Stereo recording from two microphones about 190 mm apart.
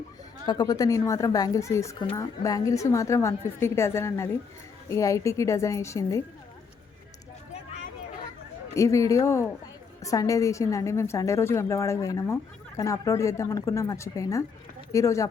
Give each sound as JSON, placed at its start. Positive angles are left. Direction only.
{"t": 0.4, "sound": "a woman's voice", "side_deg": 20}
{"t": 8.7, "sound": "a woman's voice", "side_deg": 15}